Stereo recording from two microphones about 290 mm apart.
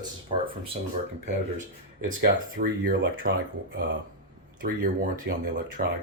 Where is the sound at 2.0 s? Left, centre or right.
Right.